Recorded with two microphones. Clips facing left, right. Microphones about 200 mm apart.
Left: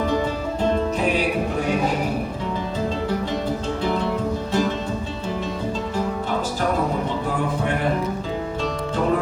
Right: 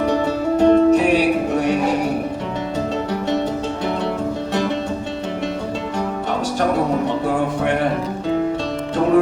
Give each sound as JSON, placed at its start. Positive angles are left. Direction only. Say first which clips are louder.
{"t": 0.6, "sound": "music", "louder": "right 9 dB", "side_deg": -70}